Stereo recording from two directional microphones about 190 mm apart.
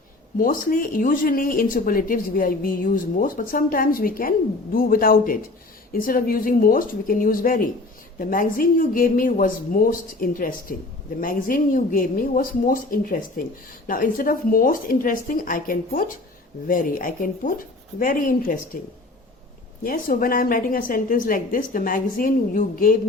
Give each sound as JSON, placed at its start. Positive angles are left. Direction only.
{"t": 0.3, "sound": "speech", "side_deg": 45}
{"t": 19.8, "sound": "speech", "side_deg": 50}